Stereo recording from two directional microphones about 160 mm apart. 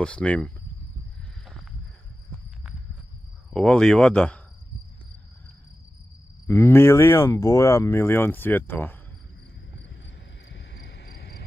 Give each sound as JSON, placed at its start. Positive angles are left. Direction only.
{"t": 0.0, "sound": "speech", "side_deg": 5}
{"t": 3.5, "sound": "speech", "side_deg": 5}
{"t": 6.4, "sound": "speech", "side_deg": 15}
{"t": 10.5, "sound": "cricket", "side_deg": 90}